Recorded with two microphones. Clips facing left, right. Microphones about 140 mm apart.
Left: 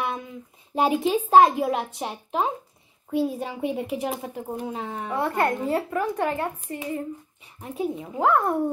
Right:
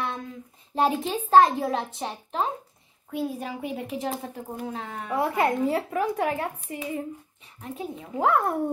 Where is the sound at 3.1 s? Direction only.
20° left (ahead or behind).